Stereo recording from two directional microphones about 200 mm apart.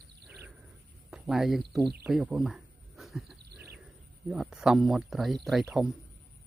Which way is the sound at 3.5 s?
55° right (ahead or behind).